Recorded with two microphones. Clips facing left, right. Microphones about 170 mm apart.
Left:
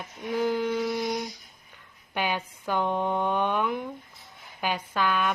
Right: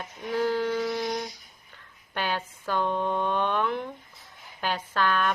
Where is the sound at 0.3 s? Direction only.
15° left (ahead or behind).